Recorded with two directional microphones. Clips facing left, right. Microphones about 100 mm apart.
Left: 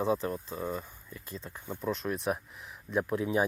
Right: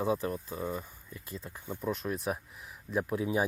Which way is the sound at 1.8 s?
5° right (ahead or behind).